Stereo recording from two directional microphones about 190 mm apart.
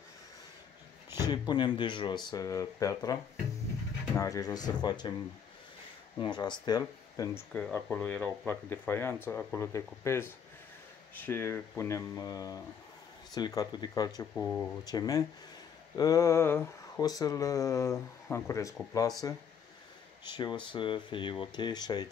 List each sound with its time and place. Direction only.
1.3 s speech: 25° left (ahead or behind)
4.2 s speech: 15° left (ahead or behind)
6.1 s speech: 25° left (ahead or behind)
7.5 s speech: 5° left (ahead or behind)
14.3 s speech: 5° left (ahead or behind)
14.9 s speech: 20° left (ahead or behind)